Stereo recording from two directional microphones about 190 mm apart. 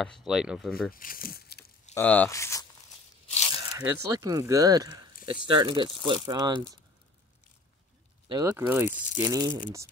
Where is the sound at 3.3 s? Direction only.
30° left (ahead or behind).